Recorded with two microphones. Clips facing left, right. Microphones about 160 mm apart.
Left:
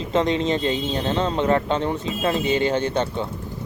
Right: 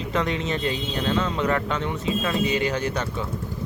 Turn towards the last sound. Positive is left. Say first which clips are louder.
# left 4 dB
turn(degrees=30)  # may be behind; listen again after turning